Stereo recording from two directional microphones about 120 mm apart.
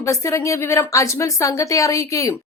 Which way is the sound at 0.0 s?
25° left (ahead or behind).